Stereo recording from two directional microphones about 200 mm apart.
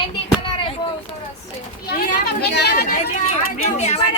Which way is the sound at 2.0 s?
55° left (ahead or behind).